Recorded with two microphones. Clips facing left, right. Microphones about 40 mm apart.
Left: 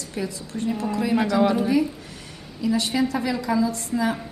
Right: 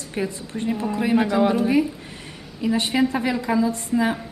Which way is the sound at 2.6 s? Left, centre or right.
Right.